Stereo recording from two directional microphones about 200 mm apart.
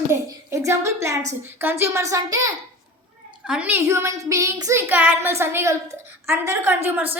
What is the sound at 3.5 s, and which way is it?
A woman's voice, 5° right (ahead or behind).